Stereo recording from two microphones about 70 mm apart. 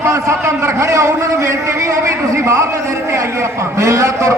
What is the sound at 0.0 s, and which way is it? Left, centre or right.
A man's voice, right.